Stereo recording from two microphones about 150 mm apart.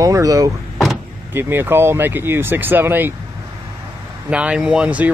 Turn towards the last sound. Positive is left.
turn(degrees=-10)  # may be behind; listen again after turning